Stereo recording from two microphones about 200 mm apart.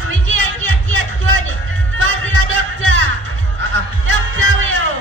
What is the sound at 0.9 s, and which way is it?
Music, 85° right.